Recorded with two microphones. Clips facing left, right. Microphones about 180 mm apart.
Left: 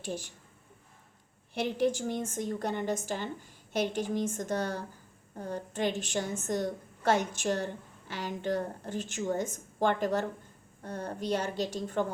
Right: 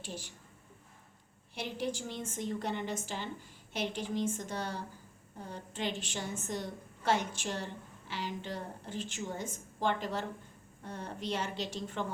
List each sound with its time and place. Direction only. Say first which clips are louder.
0.0 s a woman's voice: left 7 dB; 50° left (ahead or behind)
1.5 s a woman's voice: left 8 dB; 50° left (ahead or behind)